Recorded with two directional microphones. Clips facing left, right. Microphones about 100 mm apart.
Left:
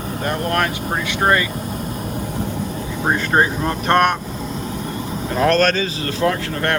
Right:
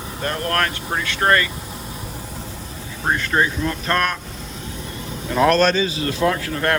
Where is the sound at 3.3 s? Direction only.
35° left (ahead or behind).